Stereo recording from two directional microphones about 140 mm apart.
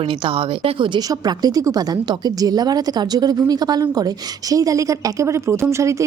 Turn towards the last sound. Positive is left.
turn(degrees=-20)  # may be behind; listen again after turning